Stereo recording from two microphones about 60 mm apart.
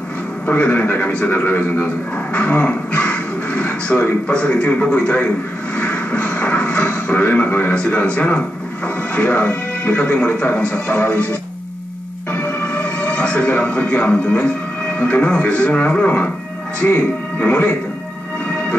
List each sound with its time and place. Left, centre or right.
0.5 s speech: left
2.3 s television: left
4.3 s speech: left
12.3 s music: left
15.0 s speech: left